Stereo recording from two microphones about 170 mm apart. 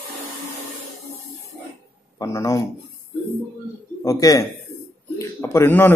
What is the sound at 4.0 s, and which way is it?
Speech, 20° left (ahead or behind).